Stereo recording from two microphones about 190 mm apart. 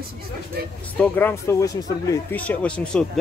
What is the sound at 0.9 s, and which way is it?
Speech, 10° left (ahead or behind).